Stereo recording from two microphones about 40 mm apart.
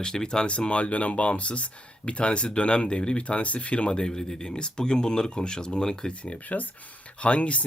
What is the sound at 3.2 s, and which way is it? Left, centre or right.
Speech, left.